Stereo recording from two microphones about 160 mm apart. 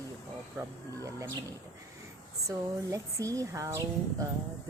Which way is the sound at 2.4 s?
20° right (ahead or behind).